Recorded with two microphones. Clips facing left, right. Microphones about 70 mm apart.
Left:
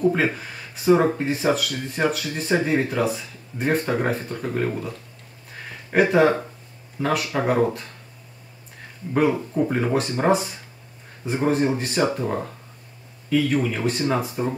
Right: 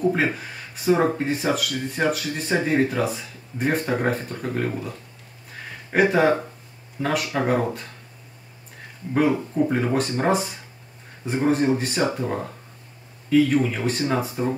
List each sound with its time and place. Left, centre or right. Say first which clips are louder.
0.1 s speech: even; centre
5.9 s speech: left 1 dB; centre
9.1 s speech: even; centre
13.3 s speech: right 2 dB; centre